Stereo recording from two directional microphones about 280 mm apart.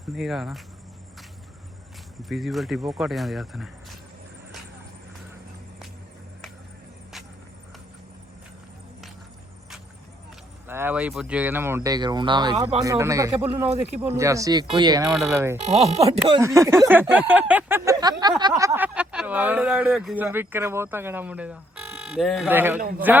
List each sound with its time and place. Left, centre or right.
0.2 s speech: centre
2.3 s speech: centre
10.7 s speech: centre
15.5 s speech: right
16.1 s speech: centre